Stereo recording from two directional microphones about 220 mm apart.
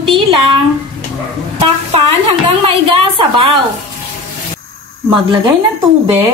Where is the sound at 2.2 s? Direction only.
25° right (ahead or behind).